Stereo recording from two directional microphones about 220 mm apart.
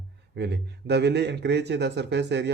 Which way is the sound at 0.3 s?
50° right (ahead or behind).